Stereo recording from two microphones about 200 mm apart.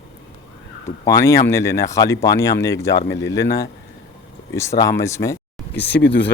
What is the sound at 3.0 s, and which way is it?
Speech, 65° left (ahead or behind).